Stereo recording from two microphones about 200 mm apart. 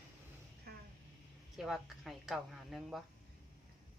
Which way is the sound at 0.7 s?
50° right (ahead or behind).